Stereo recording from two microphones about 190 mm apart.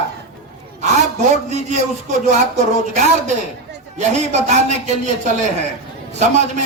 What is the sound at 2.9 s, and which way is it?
Speech, 40° right (ahead or behind).